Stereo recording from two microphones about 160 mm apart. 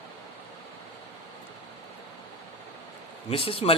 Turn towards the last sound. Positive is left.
turn(degrees=35)  # may be behind; listen again after turning